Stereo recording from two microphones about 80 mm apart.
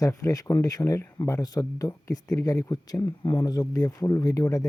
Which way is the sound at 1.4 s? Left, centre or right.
Left.